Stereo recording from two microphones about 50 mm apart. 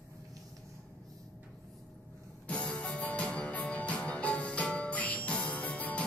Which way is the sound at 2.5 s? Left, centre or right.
Left.